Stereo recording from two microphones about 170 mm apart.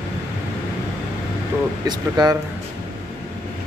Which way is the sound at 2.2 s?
25° right (ahead or behind).